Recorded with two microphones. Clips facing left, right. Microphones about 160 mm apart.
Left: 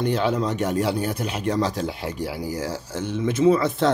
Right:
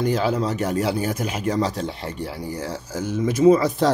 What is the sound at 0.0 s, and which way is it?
Speech, 5° right (ahead or behind).